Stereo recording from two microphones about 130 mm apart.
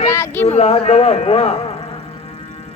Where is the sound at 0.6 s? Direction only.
50° left (ahead or behind).